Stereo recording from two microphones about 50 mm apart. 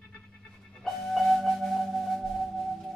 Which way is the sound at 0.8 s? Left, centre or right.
Centre.